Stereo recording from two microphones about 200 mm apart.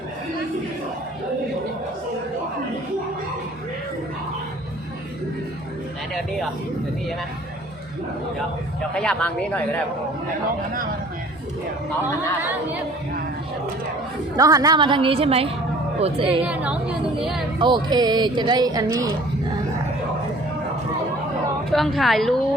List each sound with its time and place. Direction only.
9.0 s a woman's voice: 5° left (ahead or behind)
14.3 s speech: 15° right (ahead or behind)
16.5 s a woman's voice: 5° right (ahead or behind)
17.6 s speech: 20° right (ahead or behind)
21.7 s a woman's voice: centre (ahead or behind)